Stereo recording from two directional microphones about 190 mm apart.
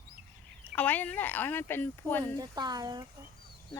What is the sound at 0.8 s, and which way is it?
Speech, 10° left (ahead or behind).